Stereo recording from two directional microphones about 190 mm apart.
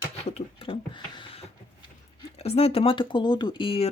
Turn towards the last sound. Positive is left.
turn(degrees=30)  # may be behind; listen again after turning